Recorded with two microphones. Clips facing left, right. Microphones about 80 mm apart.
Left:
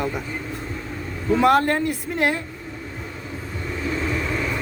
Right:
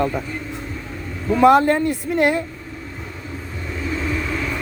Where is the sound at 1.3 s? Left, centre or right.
Centre.